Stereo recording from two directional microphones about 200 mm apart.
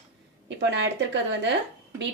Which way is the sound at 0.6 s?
60° right (ahead or behind).